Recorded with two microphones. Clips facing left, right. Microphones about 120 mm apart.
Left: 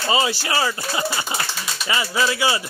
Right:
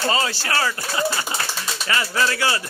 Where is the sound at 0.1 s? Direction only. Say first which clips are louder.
Left 2 dB; 15° left (ahead or behind).